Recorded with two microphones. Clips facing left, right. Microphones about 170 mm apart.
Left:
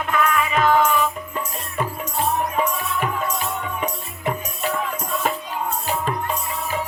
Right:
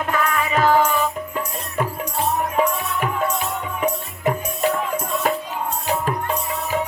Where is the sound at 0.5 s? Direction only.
35° right (ahead or behind).